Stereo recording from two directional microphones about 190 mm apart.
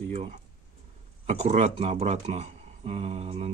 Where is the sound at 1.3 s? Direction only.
35° right (ahead or behind).